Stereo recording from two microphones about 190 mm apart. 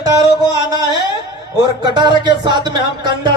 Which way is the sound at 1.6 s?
20° right (ahead or behind).